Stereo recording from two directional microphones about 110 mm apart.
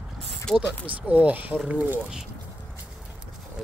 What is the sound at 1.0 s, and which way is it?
Speech, 15° right (ahead or behind).